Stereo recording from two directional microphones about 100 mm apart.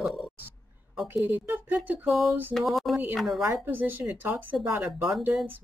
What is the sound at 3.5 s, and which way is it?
Speech, 20° right (ahead or behind).